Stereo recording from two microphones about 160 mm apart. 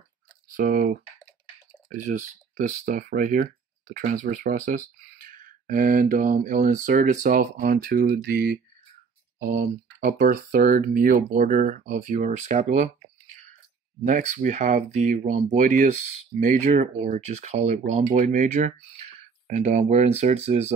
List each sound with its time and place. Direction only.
0.6 s speech: 55° right (ahead or behind)
2.0 s speech: 50° right (ahead or behind); by 8.5 s 75° right (ahead or behind)
9.4 s speech: 65° right (ahead or behind)
14.0 s speech: 50° right (ahead or behind)